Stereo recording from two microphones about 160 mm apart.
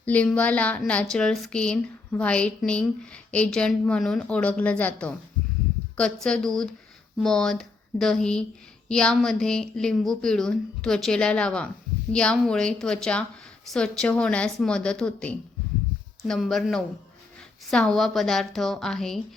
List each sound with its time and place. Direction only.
0.0 s a woman's voice: 10° left (ahead or behind)